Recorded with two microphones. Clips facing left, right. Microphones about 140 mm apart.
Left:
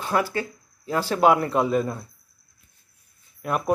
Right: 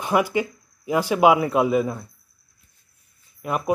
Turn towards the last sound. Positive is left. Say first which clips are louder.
# even
turn(degrees=-5)  # may be behind; listen again after turning